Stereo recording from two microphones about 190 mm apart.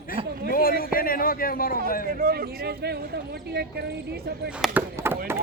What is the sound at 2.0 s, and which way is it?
Speech, 50° right (ahead or behind).